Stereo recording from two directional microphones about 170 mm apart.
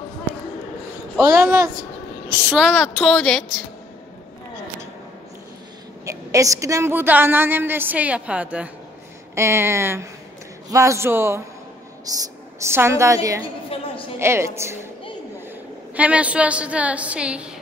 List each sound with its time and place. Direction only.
1.2 s a woman's voice: 15° right (ahead or behind)
2.5 s a woman's voice: centre (ahead or behind)
6.0 s a woman's voice: 20° right (ahead or behind)
13.7 s a sound: 30° left (ahead or behind)
14.1 s a woman's voice: 15° right (ahead or behind)
15.9 s a woman's voice: 10° right (ahead or behind)